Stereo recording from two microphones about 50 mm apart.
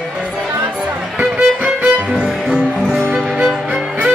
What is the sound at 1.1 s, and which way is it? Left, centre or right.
Music, right.